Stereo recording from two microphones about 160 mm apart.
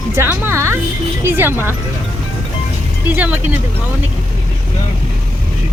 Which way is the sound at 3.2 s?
10° right (ahead or behind).